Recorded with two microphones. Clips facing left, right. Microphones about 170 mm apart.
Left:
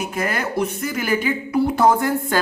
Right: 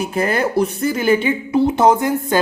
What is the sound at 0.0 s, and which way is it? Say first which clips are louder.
A woman's voice: right 6 dB; 30° right (ahead or behind).